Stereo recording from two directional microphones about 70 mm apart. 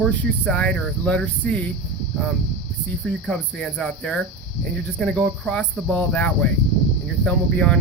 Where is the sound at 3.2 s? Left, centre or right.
Centre.